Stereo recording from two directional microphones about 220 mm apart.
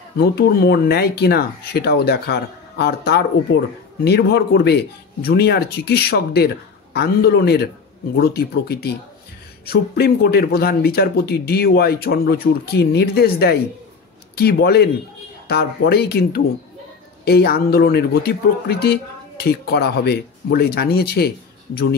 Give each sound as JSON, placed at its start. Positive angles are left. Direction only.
{"t": 0.2, "sound": "speech", "side_deg": 45}